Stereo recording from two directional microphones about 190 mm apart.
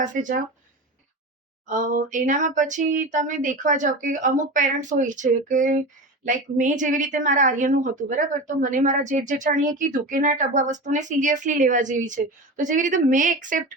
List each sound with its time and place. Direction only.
0.0 s speech: 45° right (ahead or behind)
1.6 s a woman's voice: 40° right (ahead or behind)